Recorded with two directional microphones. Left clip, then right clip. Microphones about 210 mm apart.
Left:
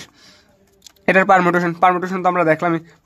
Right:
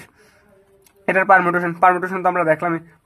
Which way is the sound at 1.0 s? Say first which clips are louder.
Left 1 dB; 35° left (ahead or behind).